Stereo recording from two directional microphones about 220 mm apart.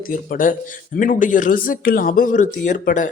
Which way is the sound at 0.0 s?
40° left (ahead or behind).